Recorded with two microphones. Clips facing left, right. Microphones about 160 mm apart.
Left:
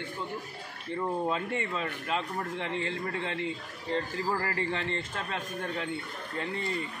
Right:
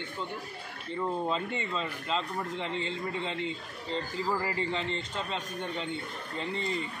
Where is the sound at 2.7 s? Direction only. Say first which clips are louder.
Left 1 dB; 60° left (ahead or behind).